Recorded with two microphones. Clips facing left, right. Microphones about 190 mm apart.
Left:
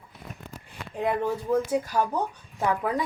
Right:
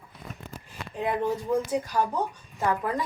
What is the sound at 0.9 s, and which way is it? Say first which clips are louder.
Speech: left 1 dB; centre (ahead or behind).